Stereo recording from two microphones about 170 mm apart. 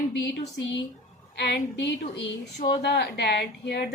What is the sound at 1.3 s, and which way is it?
A woman's voice, 85° left.